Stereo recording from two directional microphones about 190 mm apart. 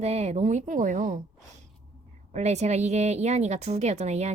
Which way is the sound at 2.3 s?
35° right (ahead or behind).